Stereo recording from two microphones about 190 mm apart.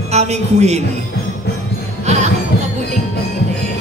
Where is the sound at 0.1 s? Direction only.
35° right (ahead or behind).